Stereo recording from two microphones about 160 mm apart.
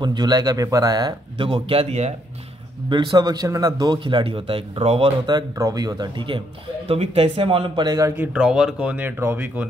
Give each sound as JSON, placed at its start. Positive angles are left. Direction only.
{"t": 0.0, "sound": "speech", "side_deg": -25}
{"t": 2.9, "sound": "speech", "side_deg": -25}
{"t": 8.2, "sound": "speech", "side_deg": -5}